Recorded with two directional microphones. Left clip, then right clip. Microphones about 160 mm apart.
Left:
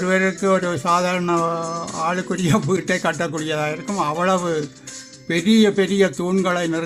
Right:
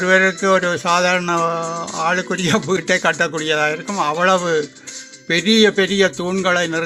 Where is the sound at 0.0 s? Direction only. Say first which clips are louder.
Right 5 dB; 15° right (ahead or behind).